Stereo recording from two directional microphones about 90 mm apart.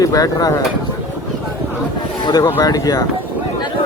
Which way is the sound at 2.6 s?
45° left (ahead or behind).